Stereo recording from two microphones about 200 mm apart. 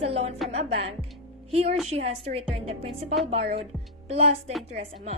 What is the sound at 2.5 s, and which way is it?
Music, 30° right (ahead or behind).